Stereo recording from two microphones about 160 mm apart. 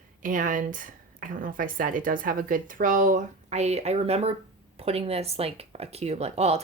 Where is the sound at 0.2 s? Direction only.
55° right (ahead or behind).